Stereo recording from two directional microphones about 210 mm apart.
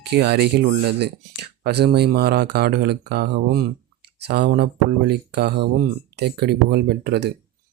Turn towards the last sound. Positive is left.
turn(degrees=-50)  # may be behind; listen again after turning